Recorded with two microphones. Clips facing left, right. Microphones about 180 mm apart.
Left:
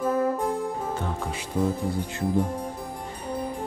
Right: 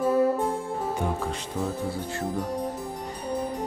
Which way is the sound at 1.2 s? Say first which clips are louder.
Left 3 dB; 10° left (ahead or behind).